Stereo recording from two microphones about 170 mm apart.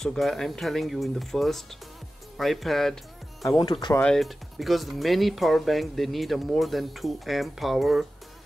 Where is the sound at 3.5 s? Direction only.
30° left (ahead or behind).